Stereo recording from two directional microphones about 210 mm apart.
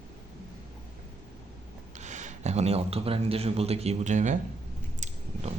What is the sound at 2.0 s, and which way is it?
Speech, 35° right (ahead or behind).